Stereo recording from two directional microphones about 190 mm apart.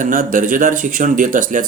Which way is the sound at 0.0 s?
45° right (ahead or behind).